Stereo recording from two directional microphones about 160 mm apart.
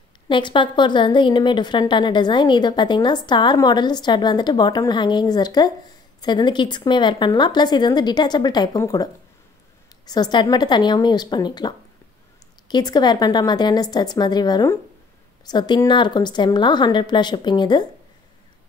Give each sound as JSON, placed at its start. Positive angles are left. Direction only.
{"t": 0.3, "sound": "a woman's voice", "side_deg": 30}